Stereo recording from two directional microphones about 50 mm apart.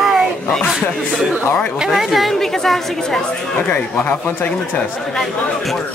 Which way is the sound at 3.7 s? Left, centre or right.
Left.